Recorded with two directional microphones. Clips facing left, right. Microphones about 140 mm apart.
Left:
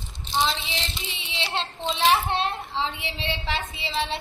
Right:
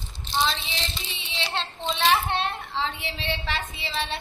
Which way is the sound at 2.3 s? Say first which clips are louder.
Left 1 dB; 25° left (ahead or behind).